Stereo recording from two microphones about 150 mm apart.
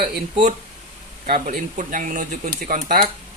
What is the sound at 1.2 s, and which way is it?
Speech, 55° right (ahead or behind).